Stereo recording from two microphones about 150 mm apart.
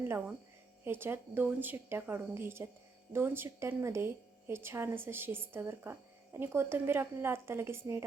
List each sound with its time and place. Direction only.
0.0 s a woman's voice: 15° right (ahead or behind)